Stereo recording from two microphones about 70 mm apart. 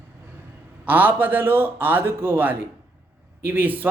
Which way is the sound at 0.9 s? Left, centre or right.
Right.